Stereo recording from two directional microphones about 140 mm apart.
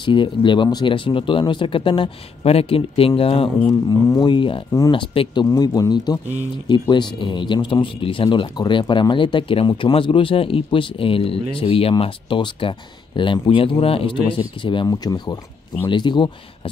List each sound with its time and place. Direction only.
0.0 s speech: 35° left (ahead or behind)
3.6 s speech: 25° left (ahead or behind)